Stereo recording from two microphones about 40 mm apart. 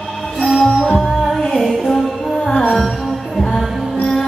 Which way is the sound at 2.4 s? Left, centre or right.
Left.